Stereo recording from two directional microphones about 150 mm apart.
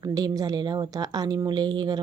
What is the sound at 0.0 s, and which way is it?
A woman's voice, 25° right (ahead or behind).